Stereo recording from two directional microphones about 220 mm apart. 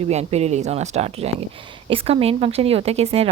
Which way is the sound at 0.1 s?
30° right (ahead or behind).